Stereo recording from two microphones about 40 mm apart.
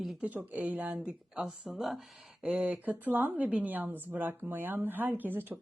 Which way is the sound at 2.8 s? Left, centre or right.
Right.